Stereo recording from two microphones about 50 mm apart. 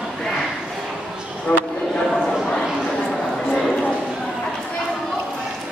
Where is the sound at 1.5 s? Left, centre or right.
Centre.